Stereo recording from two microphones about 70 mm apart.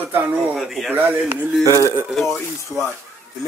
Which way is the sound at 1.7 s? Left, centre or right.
Left.